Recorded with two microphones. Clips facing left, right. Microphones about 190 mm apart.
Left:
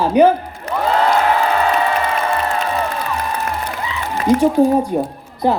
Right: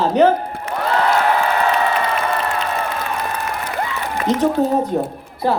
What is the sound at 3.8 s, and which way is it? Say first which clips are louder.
Applause: right 2 dB; 55° right (ahead or behind).